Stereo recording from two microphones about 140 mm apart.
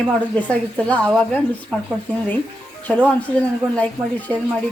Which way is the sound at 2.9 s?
10° left (ahead or behind).